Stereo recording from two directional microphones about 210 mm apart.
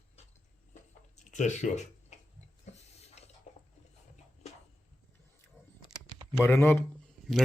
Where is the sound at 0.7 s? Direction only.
35° left (ahead or behind).